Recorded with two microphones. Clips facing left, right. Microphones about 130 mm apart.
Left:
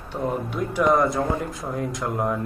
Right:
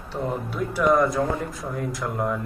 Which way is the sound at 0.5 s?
20° left (ahead or behind).